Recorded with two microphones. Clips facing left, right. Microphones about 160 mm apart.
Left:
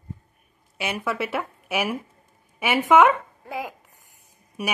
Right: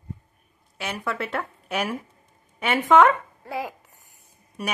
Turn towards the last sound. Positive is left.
turn(degrees=10)  # may be behind; listen again after turning